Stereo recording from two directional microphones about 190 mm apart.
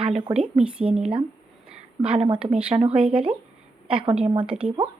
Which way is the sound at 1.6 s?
5° right (ahead or behind).